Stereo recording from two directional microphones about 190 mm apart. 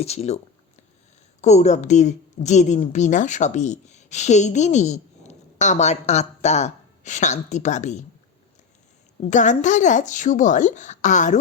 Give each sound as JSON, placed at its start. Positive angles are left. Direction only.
{"t": 0.0, "sound": "a woman's voice", "side_deg": 35}
{"t": 1.4, "sound": "a woman's voice", "side_deg": 35}
{"t": 9.3, "sound": "a woman's voice", "side_deg": 40}